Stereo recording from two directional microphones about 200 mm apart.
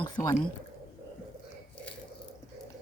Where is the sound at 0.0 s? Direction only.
20° left (ahead or behind).